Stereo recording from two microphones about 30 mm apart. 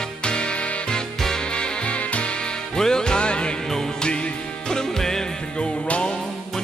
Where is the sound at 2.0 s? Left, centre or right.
Left.